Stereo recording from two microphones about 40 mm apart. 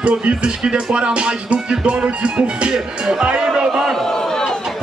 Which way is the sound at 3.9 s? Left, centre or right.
Centre.